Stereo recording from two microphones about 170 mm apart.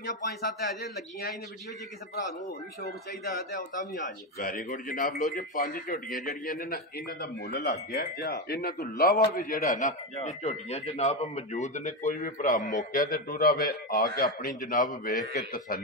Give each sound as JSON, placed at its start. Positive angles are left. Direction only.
{"t": 0.0, "sound": "a man's voice", "side_deg": 65}
{"t": 2.8, "sound": "speech", "side_deg": 60}
{"t": 7.9, "sound": "a man's voice", "side_deg": 65}